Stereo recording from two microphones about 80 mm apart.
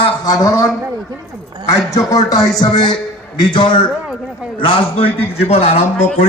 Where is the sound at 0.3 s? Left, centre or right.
Left.